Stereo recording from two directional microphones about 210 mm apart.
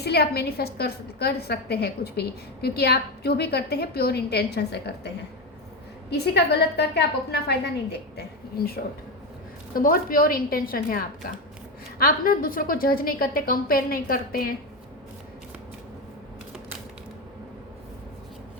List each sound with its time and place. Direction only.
0.0 s a woman's voice: 50° left (ahead or behind)
9.7 s a woman's voice: 45° left (ahead or behind)